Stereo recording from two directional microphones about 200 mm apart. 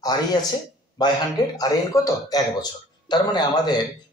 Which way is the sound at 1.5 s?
15° left (ahead or behind).